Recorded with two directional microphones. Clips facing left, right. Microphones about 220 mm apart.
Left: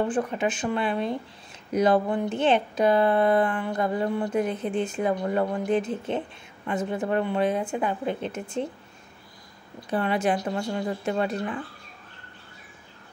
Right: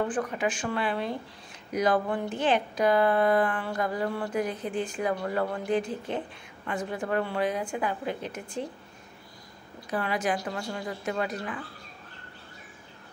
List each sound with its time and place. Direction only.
0.1 s speech: 25° left (ahead or behind)
9.8 s speech: 25° left (ahead or behind)